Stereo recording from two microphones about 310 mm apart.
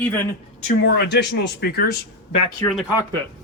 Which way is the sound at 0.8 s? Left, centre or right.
Left.